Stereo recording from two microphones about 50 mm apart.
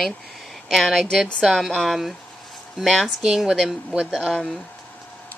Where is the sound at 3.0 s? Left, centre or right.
Centre.